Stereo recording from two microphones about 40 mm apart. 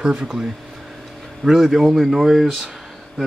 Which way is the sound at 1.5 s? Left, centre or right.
Centre.